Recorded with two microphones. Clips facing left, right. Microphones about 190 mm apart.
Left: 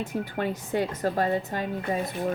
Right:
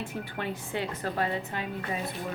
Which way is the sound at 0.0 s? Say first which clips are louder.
Left 6 dB; 40° left (ahead or behind).